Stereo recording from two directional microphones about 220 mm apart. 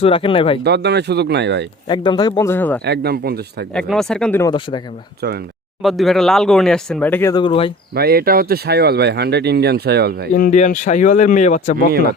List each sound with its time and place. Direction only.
0.0 s speech: 25° left (ahead or behind)
0.6 s speech: 50° right (ahead or behind)
1.9 s speech: 20° left (ahead or behind)
2.8 s speech: 45° right (ahead or behind)
3.8 s speech: centre (ahead or behind)
5.8 s speech: centre (ahead or behind); by 7.7 s 25° left (ahead or behind)
7.9 s speech: 45° right (ahead or behind)
10.3 s speech: 35° left (ahead or behind)